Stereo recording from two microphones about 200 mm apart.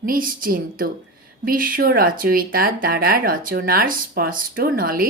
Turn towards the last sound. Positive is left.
turn(degrees=-45)  # may be behind; listen again after turning